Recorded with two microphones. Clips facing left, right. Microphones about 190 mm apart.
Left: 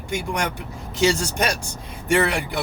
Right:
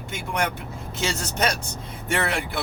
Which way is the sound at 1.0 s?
15° left (ahead or behind).